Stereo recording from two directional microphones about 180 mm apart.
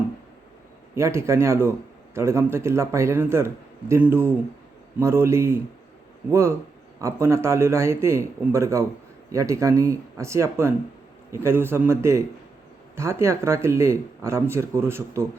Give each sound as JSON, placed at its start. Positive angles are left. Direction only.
{"t": 0.9, "sound": "speech", "side_deg": -15}